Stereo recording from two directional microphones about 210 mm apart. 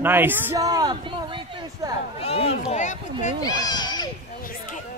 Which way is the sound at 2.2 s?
30° left (ahead or behind).